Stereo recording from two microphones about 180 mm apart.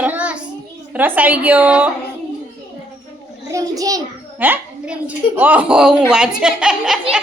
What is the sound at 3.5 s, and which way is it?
Speech, 20° right (ahead or behind).